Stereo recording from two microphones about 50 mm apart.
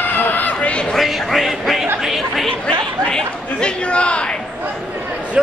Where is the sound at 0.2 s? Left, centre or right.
Left.